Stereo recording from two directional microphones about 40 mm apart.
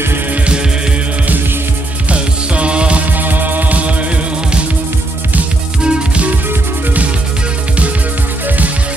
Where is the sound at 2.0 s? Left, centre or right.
Right.